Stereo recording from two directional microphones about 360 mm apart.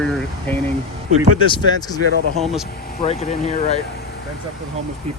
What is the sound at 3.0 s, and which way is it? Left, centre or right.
Speech, centre.